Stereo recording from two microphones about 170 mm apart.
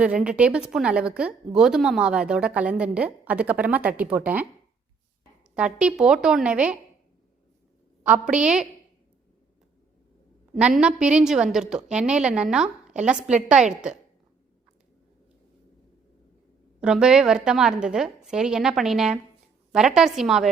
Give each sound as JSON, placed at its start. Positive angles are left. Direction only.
{"t": 0.0, "sound": "a woman's voice", "side_deg": -5}
{"t": 5.5, "sound": "a woman's voice", "side_deg": -5}
{"t": 8.0, "sound": "a woman's voice", "side_deg": -5}
{"t": 10.5, "sound": "a woman's voice", "side_deg": -5}
{"t": 16.8, "sound": "a woman's voice", "side_deg": -5}